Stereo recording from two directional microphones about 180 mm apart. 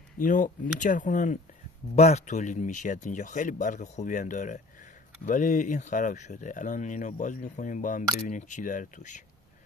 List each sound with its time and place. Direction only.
0.2 s speech: 45° left (ahead or behind)